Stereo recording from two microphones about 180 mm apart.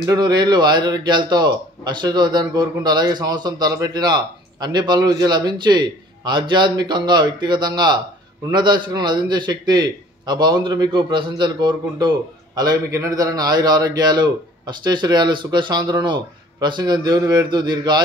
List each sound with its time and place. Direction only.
0.0 s a man's voice: 20° right (ahead or behind)